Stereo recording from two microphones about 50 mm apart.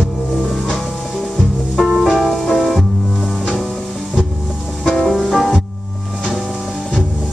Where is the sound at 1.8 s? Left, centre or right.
Centre.